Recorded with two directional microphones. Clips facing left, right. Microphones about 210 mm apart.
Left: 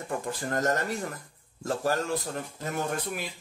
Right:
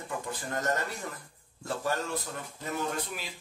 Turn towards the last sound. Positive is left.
turn(degrees=50)  # may be behind; listen again after turning